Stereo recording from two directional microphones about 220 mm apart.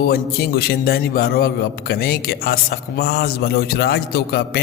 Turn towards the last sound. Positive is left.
turn(degrees=45)  # may be behind; listen again after turning